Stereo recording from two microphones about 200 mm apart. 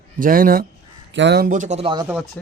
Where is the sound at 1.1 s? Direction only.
60° right (ahead or behind); by 2.0 s 30° right (ahead or behind).